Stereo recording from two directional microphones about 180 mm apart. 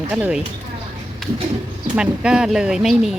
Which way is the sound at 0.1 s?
5° right (ahead or behind).